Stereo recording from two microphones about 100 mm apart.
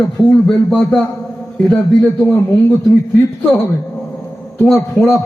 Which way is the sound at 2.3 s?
20° left (ahead or behind).